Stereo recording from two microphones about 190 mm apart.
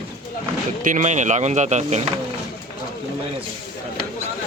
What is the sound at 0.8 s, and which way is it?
Speech, 45° right (ahead or behind).